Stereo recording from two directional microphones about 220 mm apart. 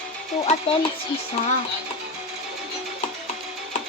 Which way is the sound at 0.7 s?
25° left (ahead or behind).